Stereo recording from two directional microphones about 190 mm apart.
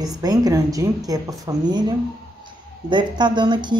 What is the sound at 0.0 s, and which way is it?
Speech, 20° right (ahead or behind).